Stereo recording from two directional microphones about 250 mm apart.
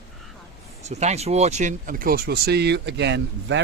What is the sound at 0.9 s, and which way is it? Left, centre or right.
Speech, right.